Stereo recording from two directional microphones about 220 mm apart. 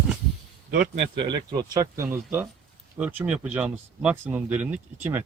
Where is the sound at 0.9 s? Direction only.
25° right (ahead or behind).